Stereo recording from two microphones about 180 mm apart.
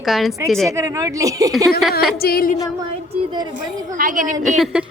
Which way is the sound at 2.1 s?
55° left (ahead or behind).